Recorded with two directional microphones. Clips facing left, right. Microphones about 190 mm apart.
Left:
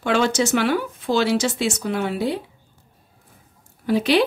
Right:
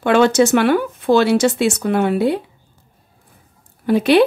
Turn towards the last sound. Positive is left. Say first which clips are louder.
# right 5 dB
turn(degrees=-55)  # may be behind; listen again after turning